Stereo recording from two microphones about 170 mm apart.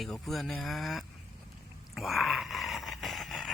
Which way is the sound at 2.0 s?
Centre (ahead or behind).